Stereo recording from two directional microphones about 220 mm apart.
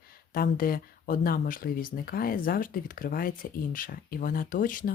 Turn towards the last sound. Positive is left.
turn(degrees=40)  # may be behind; listen again after turning